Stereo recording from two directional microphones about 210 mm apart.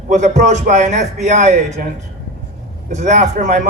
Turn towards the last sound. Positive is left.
turn(degrees=-35)  # may be behind; listen again after turning